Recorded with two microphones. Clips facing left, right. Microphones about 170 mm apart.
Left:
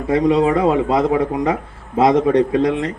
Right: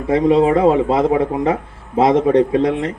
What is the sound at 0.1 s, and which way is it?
Speech, 25° right (ahead or behind).